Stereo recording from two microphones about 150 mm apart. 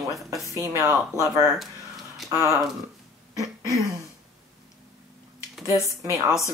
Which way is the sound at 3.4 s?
20° right (ahead or behind).